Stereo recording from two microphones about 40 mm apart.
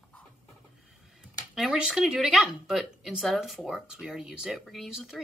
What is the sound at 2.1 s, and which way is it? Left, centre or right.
Speech, right.